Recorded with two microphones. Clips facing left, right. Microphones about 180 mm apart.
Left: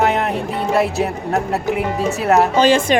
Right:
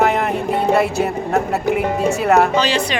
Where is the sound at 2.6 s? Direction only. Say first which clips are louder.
Left 5 dB; 50° left (ahead or behind).